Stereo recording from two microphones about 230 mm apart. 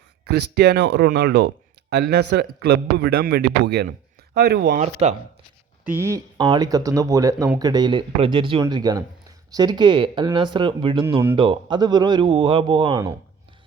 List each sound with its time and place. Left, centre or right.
0.3 s a man's voice: right
5.8 s speech: centre